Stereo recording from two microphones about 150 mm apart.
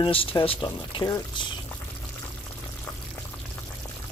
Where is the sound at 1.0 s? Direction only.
25° left (ahead or behind).